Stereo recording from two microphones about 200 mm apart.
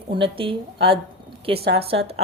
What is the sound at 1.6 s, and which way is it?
Speech, 55° right (ahead or behind).